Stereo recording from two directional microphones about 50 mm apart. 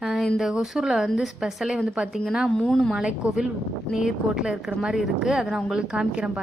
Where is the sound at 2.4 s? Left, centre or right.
Centre.